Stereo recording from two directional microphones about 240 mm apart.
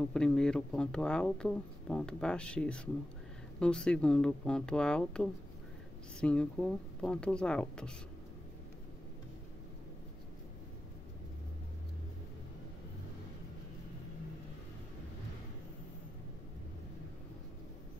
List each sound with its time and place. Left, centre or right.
0.0 s speech: centre